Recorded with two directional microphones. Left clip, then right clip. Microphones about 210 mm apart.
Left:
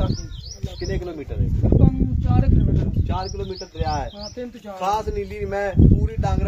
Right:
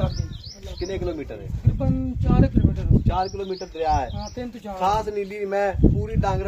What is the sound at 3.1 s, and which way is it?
Speech, 20° right (ahead or behind).